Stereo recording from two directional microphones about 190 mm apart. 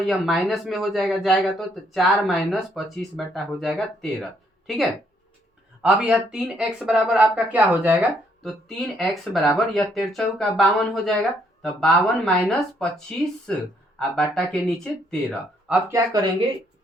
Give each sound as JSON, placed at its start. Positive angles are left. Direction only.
{"t": 0.0, "sound": "speech", "side_deg": 0}
{"t": 8.4, "sound": "speech", "side_deg": 0}
{"t": 15.9, "sound": "speech", "side_deg": -20}